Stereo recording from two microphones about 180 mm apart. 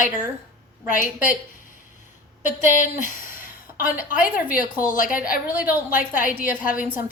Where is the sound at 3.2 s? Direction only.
50° left (ahead or behind).